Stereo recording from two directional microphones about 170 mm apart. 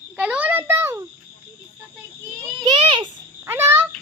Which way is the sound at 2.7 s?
30° right (ahead or behind).